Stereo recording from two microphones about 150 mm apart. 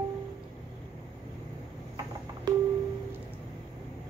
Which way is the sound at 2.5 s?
25° right (ahead or behind).